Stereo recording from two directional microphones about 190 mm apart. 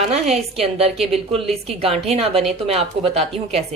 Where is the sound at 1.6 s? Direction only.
35° right (ahead or behind).